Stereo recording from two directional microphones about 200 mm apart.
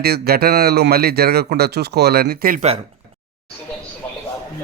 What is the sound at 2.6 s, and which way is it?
Speech, 30° right (ahead or behind).